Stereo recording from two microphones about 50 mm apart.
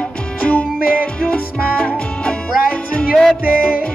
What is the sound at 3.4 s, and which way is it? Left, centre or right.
Music, right.